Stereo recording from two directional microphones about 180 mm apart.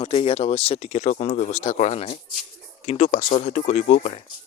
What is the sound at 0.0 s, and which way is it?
Speech, 30° left (ahead or behind).